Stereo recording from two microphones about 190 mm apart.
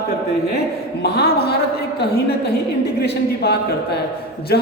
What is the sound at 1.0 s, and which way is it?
Speech, 60° left (ahead or behind).